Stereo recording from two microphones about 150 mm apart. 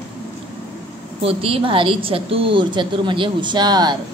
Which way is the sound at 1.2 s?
40° right (ahead or behind).